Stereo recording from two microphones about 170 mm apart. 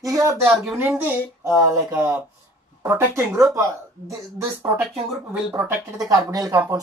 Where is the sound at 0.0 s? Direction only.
20° right (ahead or behind).